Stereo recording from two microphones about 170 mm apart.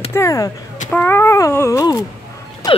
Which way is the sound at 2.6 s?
20° left (ahead or behind).